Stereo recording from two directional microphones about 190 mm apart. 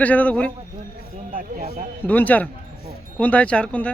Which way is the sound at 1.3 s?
45° right (ahead or behind).